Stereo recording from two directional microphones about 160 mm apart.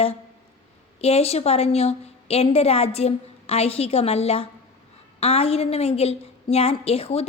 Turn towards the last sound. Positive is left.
turn(degrees=40)  # may be behind; listen again after turning